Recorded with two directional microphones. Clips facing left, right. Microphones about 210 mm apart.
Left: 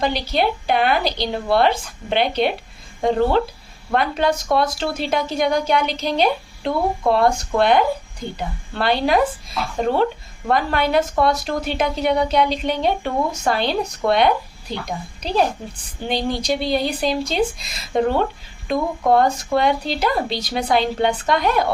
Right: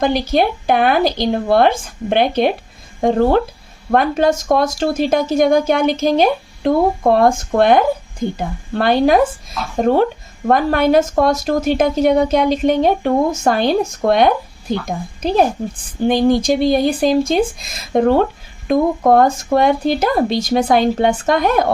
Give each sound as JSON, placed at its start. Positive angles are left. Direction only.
{"t": 0.0, "sound": "a woman's voice", "side_deg": -50}